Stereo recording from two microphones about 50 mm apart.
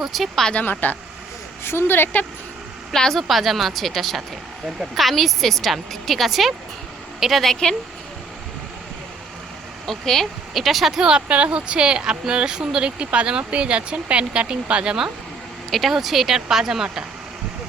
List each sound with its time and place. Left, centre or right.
0.0 s speech: centre
0.6 s speech: left
1.6 s a woman's voice: left
2.9 s speech: centre
7.4 s a woman's voice: centre
9.8 s speech: centre; by 14.9 s right
15.7 s speech: centre